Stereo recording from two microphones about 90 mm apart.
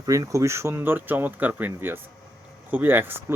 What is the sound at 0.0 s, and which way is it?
Speech, 40° right (ahead or behind).